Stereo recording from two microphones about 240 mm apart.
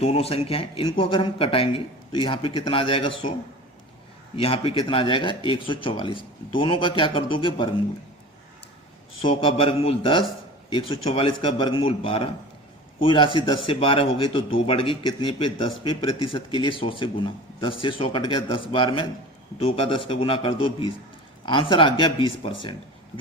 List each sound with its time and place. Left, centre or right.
0.0 s speech: left
4.4 s speech: left
9.4 s speech: left